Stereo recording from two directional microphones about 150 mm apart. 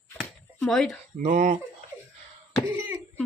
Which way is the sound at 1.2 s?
60° right (ahead or behind).